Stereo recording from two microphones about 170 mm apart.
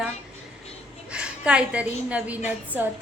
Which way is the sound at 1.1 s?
5° right (ahead or behind).